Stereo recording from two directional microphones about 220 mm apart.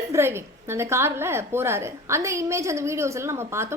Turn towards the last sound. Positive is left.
turn(degrees=-10)  # may be behind; listen again after turning